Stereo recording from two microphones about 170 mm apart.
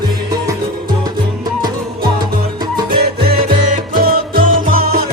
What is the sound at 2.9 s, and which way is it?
Music, 65° right (ahead or behind).